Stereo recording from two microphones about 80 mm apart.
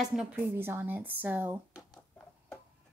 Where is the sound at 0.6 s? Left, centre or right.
Right.